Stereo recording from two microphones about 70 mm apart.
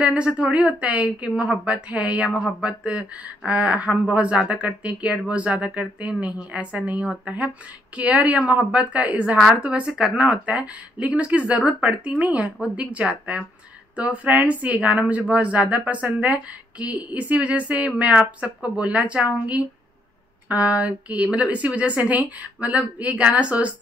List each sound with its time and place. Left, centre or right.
0.0 s speech: centre